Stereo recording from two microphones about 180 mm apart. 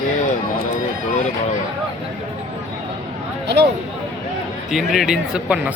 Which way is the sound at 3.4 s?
70° right (ahead or behind).